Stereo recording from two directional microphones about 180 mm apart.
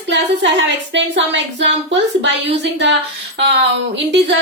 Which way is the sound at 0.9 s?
85° right.